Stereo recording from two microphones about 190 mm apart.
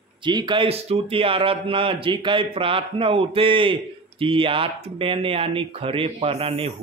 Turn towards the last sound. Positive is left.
turn(degrees=-30)  # may be behind; listen again after turning